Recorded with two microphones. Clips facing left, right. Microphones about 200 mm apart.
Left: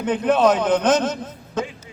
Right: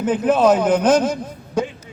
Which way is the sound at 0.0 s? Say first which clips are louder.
Right 2 dB; 5° right (ahead or behind).